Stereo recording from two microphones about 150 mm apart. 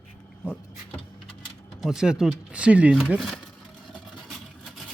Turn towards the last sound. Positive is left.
turn(degrees=0)  # may be behind; listen again after turning